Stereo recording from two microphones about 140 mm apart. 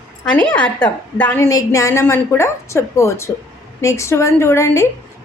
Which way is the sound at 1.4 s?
25° left (ahead or behind).